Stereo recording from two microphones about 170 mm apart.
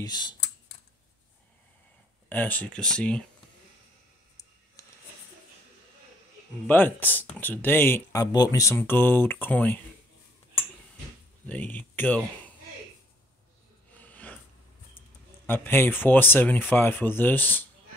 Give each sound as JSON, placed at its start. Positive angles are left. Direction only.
{"t": 0.0, "sound": "speech", "side_deg": 25}
{"t": 2.2, "sound": "speech", "side_deg": 10}
{"t": 4.8, "sound": "a sound", "side_deg": 20}
{"t": 6.7, "sound": "speech", "side_deg": 10}
{"t": 11.4, "sound": "speech", "side_deg": 10}
{"t": 13.9, "sound": "a sound", "side_deg": 10}
{"t": 15.4, "sound": "speech", "side_deg": 10}